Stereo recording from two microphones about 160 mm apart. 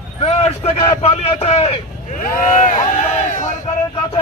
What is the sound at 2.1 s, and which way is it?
Speech, 60° left (ahead or behind).